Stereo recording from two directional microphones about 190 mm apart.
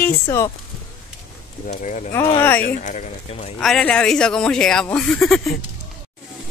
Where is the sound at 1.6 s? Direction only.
40° left (ahead or behind).